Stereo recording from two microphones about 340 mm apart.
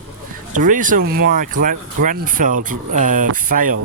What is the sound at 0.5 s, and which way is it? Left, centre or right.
Speech, right.